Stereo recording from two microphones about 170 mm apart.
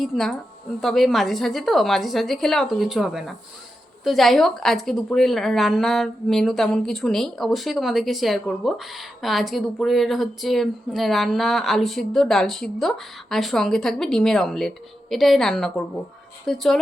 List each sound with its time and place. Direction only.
0.0 s speech: centre (ahead or behind)